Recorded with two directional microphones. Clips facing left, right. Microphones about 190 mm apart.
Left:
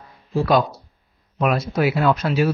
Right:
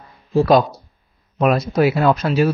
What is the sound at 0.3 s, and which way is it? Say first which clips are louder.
Speech: right 4 dB; 40° right (ahead or behind).